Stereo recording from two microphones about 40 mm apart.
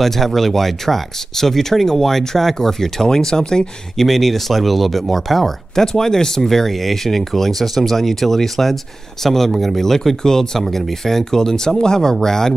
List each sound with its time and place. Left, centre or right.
0.0 s speech: centre
4.0 s speech: centre
5.9 s speech: centre